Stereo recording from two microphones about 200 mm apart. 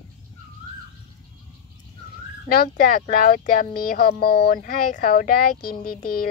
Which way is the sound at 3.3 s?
45° left (ahead or behind).